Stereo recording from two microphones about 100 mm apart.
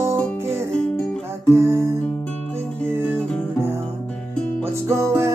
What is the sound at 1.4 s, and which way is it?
Music, 25° right (ahead or behind).